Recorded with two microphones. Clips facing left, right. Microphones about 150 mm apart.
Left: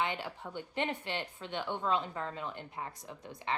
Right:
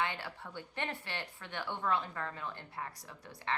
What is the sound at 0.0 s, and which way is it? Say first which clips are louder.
A woman's voice: left 2 dB; 20° left (ahead or behind).